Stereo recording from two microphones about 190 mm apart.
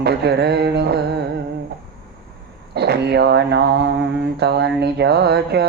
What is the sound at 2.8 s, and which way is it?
Speech, 60° right (ahead or behind).